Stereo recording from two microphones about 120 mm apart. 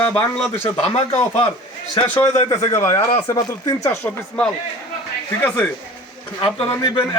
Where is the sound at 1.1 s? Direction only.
20° left (ahead or behind).